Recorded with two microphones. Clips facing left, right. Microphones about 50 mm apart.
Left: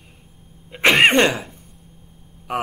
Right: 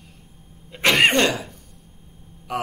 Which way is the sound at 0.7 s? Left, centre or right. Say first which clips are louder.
Left 3 dB; left.